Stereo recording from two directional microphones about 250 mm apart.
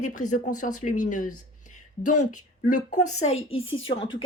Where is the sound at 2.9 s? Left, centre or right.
Left.